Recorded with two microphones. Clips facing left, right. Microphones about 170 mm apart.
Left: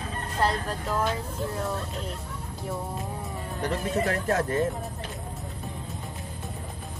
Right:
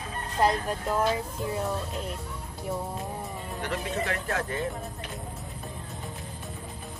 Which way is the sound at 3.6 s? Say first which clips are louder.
Left 4 dB; 35° left (ahead or behind).